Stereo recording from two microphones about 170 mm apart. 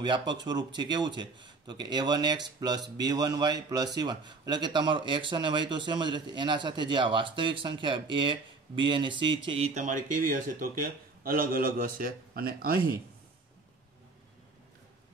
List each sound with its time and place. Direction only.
0.0 s a man's voice: 25° right (ahead or behind)
9.8 s a man's voice: 50° right (ahead or behind)